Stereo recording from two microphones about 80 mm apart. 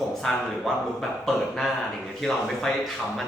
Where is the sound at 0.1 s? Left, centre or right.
Centre.